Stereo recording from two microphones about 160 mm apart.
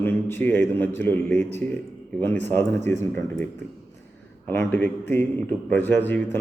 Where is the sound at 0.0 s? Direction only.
15° left (ahead or behind).